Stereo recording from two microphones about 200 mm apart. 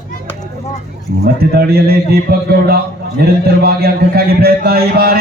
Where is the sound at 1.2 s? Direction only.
50° right (ahead or behind).